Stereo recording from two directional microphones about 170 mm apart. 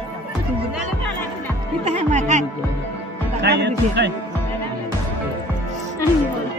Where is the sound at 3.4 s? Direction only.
90° right.